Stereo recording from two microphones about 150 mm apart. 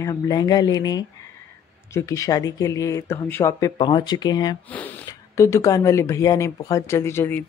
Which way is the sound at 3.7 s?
30° left (ahead or behind).